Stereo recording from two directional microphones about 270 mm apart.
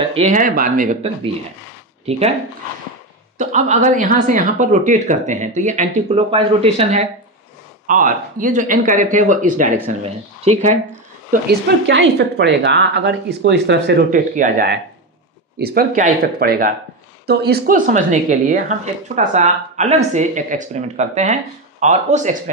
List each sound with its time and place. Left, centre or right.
0.1 s speech: right
2.0 s speech: right
3.3 s speech: right
11.4 s speech: right